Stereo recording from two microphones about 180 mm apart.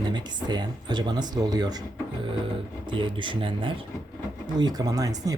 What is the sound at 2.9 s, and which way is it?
Speech, 25° right (ahead or behind).